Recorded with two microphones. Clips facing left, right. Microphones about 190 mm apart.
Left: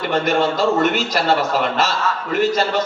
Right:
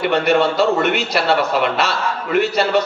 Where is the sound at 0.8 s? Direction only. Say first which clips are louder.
Even; 45° left (ahead or behind).